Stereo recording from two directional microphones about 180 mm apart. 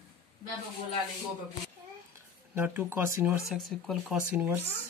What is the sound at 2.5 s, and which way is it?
Speech, 10° right (ahead or behind).